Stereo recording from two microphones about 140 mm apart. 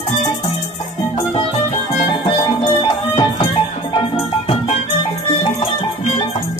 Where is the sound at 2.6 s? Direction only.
35° left (ahead or behind).